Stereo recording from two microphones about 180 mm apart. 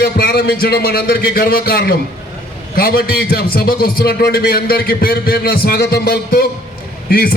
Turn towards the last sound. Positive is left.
turn(degrees=55)  # may be behind; listen again after turning